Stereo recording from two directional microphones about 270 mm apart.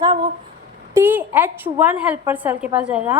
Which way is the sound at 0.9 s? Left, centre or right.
Centre.